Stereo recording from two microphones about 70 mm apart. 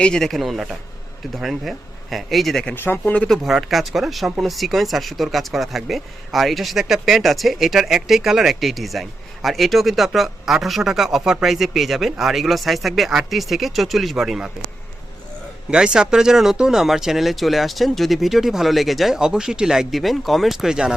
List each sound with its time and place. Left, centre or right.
0.0 s speech: centre
2.7 s speech: left
3.0 s speech: left
3.2 s speech: centre
15.7 s speech: centre